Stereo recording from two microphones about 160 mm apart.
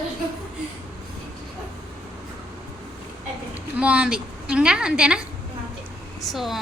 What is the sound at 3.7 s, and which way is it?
A woman's voice, 5° right (ahead or behind).